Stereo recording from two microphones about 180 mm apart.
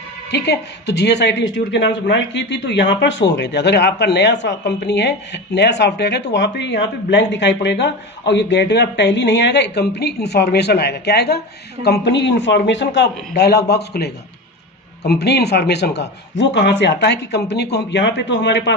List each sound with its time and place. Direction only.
0.3 s speech: 70° left (ahead or behind)